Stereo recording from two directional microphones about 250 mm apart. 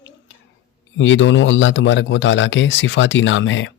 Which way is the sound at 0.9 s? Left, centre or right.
Left.